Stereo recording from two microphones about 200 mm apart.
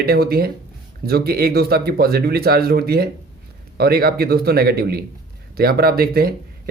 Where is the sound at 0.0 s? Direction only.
50° right (ahead or behind).